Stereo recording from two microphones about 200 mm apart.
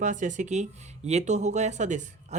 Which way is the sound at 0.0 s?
40° right (ahead or behind).